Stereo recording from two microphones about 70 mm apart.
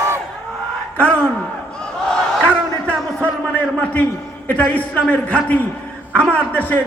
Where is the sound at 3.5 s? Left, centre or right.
Left.